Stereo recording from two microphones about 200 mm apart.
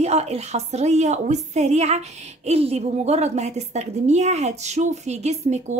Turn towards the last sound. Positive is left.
turn(degrees=-35)  # may be behind; listen again after turning